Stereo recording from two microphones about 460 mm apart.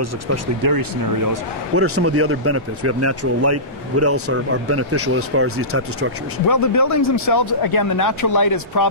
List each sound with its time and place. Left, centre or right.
0.6 s speech: right
1.8 s speech: right
6.4 s speech: left